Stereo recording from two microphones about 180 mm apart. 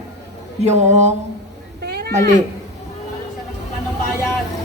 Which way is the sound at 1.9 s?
60° right (ahead or behind).